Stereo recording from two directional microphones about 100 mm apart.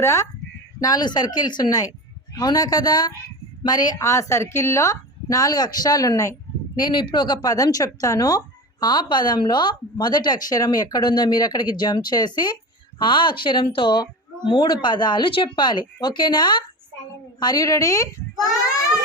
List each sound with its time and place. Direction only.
0.0 s speech: 30° left (ahead or behind)
0.8 s a woman's voice: 45° left (ahead or behind)
6.7 s a woman's voice: 50° left (ahead or behind); by 18.1 s 35° left (ahead or behind)